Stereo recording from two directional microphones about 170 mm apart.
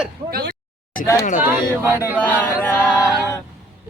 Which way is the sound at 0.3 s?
60° right (ahead or behind).